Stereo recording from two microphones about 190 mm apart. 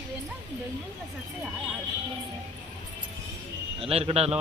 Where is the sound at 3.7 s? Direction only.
30° right (ahead or behind).